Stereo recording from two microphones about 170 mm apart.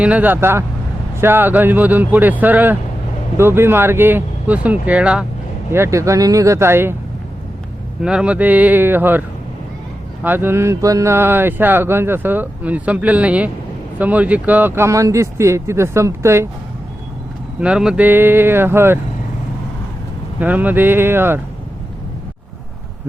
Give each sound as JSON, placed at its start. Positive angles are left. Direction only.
{"t": 0.0, "sound": "mantra", "side_deg": -10}
{"t": 8.0, "sound": "mantra", "side_deg": -5}
{"t": 10.2, "sound": "mantra", "side_deg": -10}
{"t": 17.6, "sound": "mantra", "side_deg": -5}
{"t": 20.4, "sound": "mantra", "side_deg": -10}